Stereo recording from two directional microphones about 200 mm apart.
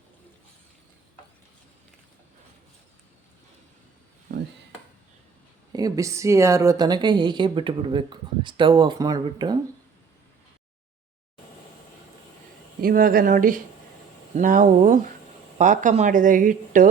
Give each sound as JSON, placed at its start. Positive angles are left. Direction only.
{"t": 5.7, "sound": "a woman's voice", "side_deg": -15}
{"t": 12.8, "sound": "speech", "side_deg": -45}